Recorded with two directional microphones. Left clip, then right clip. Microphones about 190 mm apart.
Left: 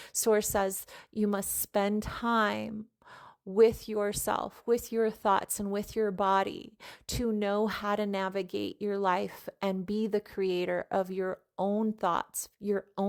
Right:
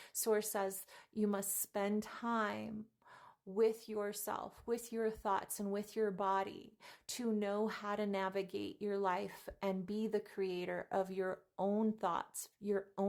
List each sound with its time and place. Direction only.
0.1 s speech: 40° left (ahead or behind)